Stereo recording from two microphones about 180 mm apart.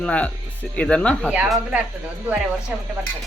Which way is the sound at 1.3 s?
5° right (ahead or behind).